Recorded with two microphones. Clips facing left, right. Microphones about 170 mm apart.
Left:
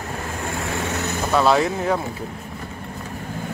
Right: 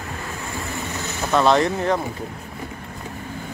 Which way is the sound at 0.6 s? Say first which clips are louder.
Left 5 dB; 90° left.